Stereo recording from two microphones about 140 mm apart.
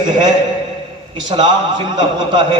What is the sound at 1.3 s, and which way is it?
A man's voice, 35° right (ahead or behind).